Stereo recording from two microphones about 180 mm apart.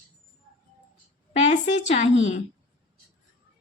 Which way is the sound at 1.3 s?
40° left (ahead or behind).